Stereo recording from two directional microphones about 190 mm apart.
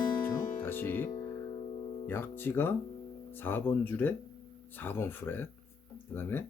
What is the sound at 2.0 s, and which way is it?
Speech, 10° left (ahead or behind).